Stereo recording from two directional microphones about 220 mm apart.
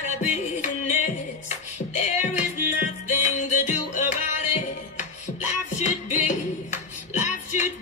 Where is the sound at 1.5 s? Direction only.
30° left (ahead or behind).